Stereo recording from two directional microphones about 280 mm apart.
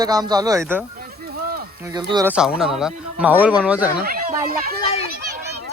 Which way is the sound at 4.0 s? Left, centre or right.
Right.